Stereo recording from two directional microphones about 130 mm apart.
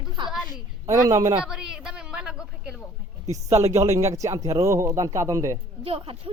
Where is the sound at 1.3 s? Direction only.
5° right (ahead or behind).